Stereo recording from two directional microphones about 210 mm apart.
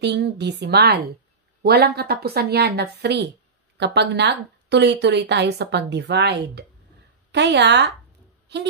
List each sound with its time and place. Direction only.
0.0 s a woman's voice: 55° right (ahead or behind)